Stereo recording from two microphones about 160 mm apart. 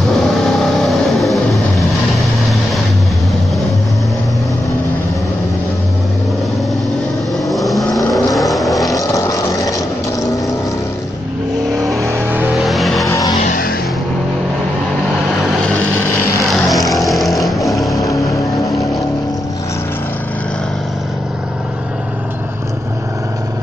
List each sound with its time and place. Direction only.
0.7 s vehicle: centre (ahead or behind)
7.4 s vehicle: centre (ahead or behind)
8.9 s vehicle: 20° left (ahead or behind)
12.0 s vehicle: 15° right (ahead or behind)
12.5 s vehicle: centre (ahead or behind)
13.0 s music: 20° left (ahead or behind)
13.4 s music: 60° left (ahead or behind)
16.6 s music: centre (ahead or behind)